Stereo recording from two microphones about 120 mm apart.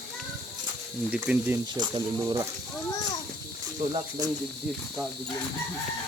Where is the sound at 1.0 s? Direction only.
10° right (ahead or behind).